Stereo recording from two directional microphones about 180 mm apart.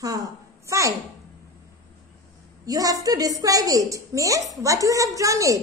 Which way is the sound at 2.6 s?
20° right (ahead or behind).